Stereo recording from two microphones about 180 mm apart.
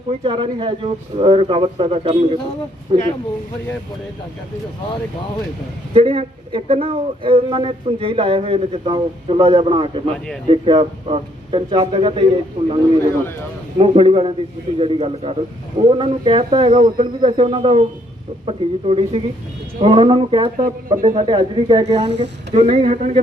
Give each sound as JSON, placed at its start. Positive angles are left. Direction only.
{"t": 0.1, "sound": "speech", "side_deg": -30}
{"t": 5.9, "sound": "speech", "side_deg": -30}
{"t": 21.8, "sound": "speech", "side_deg": -35}